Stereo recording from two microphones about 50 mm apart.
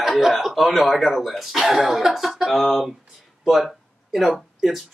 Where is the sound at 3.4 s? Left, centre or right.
Centre.